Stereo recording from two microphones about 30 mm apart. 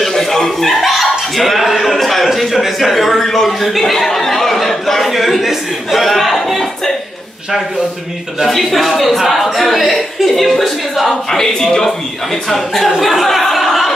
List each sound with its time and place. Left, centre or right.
0.2 s chuckle: centre
0.7 s chuckle: centre
2.0 s speech: centre
2.2 s a man's voice: centre
3.9 s chatter: centre
5.1 s a man's voice: centre
8.5 s a man's voice: centre
11.3 s speech: centre
12.4 s a man's voice: centre